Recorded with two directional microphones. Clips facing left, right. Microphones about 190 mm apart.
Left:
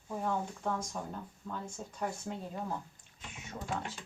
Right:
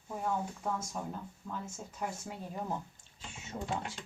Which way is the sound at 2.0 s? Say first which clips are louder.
Left 2 dB; 5° right (ahead or behind).